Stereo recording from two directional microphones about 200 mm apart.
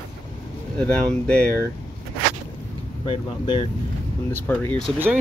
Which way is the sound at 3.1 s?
25° left (ahead or behind).